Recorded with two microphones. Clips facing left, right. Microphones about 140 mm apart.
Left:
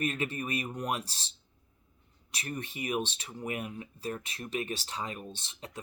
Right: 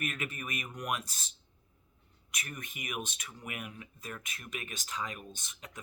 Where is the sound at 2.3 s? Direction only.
30° left (ahead or behind).